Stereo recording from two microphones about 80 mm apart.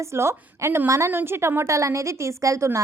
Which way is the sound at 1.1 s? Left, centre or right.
Right.